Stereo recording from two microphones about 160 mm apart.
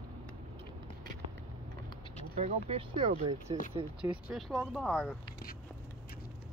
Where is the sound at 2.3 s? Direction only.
40° right (ahead or behind).